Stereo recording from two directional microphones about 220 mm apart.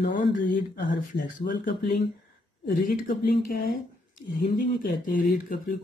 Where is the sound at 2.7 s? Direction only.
40° left (ahead or behind).